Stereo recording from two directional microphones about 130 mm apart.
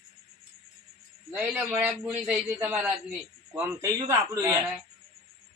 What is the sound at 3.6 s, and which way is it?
Sheep, 25° right (ahead or behind).